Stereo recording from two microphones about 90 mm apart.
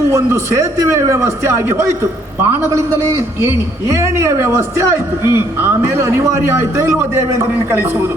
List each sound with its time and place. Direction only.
0.1 s a man's voice: 35° right (ahead or behind)